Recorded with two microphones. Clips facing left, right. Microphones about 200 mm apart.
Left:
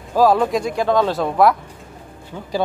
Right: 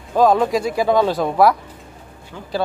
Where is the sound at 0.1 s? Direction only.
5° left (ahead or behind).